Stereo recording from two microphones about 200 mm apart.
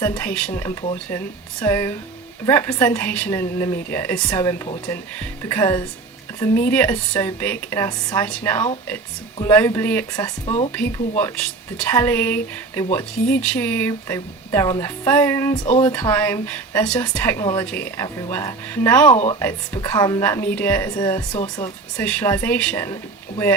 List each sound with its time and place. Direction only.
0.0 s speech: 10° left (ahead or behind)
19.1 s speech: 30° left (ahead or behind)
19.4 s speech: 10° left (ahead or behind)
21.9 s speech: 5° left (ahead or behind)